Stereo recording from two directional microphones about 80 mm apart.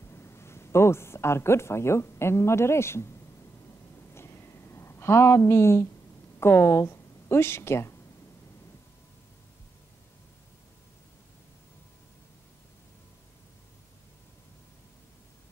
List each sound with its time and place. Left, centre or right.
0.1 s speech: left
4.1 s a sound: left
6.4 s a woman's voice: left